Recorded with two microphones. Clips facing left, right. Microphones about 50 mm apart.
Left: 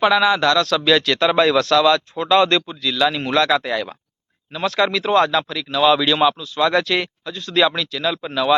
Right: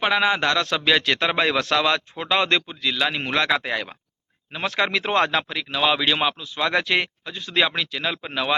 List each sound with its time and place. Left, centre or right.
0.0 s speech: right